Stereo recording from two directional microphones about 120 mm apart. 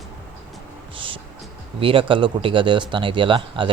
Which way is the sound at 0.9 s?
45° right (ahead or behind).